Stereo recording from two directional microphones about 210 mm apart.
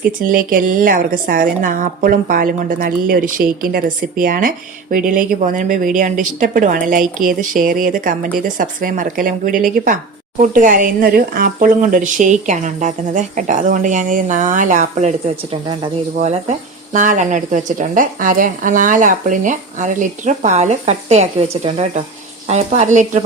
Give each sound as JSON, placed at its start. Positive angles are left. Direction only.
{"t": 0.2, "sound": "a woman's voice", "side_deg": -45}
{"t": 16.1, "sound": "a woman's voice", "side_deg": -30}